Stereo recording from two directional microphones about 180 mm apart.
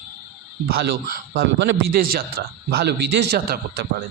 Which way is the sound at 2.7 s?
65° right (ahead or behind).